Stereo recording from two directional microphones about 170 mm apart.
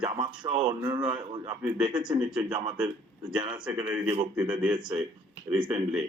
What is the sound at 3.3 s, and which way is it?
Speech, 25° right (ahead or behind).